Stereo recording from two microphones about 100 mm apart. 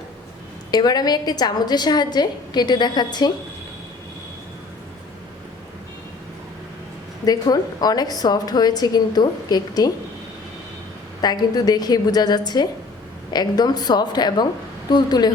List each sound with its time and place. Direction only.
0.7 s a woman's voice: 45° left (ahead or behind)
7.3 s a woman's voice: 40° left (ahead or behind)
11.2 s a woman's voice: 40° left (ahead or behind)